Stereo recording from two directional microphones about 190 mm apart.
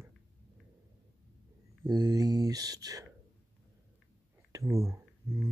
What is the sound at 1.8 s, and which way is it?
Speech, 20° right (ahead or behind).